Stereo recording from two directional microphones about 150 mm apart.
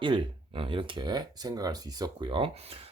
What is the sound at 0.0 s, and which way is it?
Speech, 35° right (ahead or behind).